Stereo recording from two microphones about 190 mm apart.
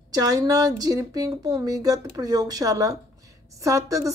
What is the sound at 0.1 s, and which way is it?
A woman's voice, 20° right (ahead or behind).